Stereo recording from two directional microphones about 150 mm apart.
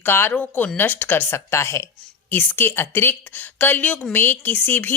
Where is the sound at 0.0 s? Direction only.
15° left (ahead or behind).